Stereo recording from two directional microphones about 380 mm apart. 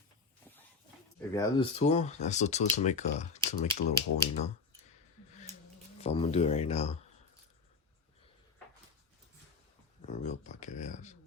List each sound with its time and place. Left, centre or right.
1.3 s speech: centre
6.0 s speech: centre
10.1 s speech: centre